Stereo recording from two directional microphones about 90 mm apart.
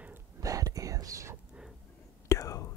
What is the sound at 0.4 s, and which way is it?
Whispering, 40° right (ahead or behind).